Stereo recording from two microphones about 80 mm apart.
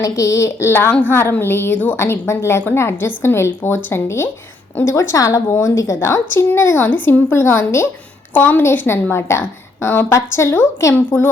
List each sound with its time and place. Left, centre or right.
0.0 s a woman's voice: left
2.0 s a woman's voice: left
5.1 s a woman's voice: left
6.3 s a woman's voice: left
10.9 s a woman's voice: left